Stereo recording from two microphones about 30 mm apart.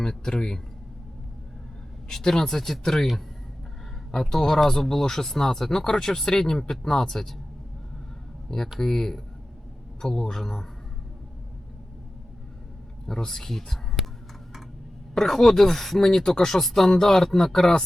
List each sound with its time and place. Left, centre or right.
0.0 s speech: centre
2.2 s speech: centre
4.1 s speech: centre
8.4 s speech: centre
13.1 s speech: centre
15.1 s speech: centre